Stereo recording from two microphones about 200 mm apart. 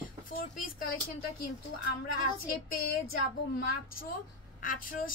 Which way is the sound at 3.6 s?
50° left (ahead or behind).